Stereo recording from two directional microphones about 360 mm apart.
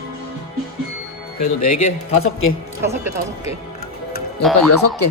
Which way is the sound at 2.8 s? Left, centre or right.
Centre.